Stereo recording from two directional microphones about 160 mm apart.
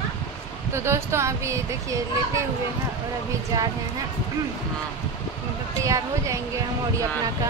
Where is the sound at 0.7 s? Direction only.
15° right (ahead or behind).